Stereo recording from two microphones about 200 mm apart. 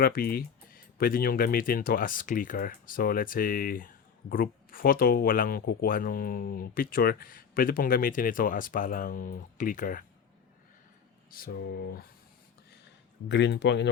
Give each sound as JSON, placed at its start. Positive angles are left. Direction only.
{"t": 0.0, "sound": "speech", "side_deg": 45}
{"t": 11.3, "sound": "speech", "side_deg": 50}
{"t": 13.2, "sound": "speech", "side_deg": 60}